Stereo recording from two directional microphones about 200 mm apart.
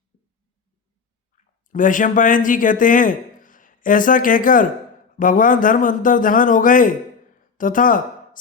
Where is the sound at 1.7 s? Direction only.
40° left (ahead or behind).